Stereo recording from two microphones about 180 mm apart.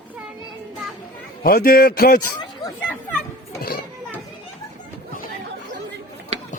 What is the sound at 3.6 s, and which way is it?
Children playing, 55° left (ahead or behind).